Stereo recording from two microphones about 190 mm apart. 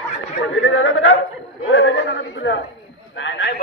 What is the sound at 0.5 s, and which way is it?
A man's voice, 90° left.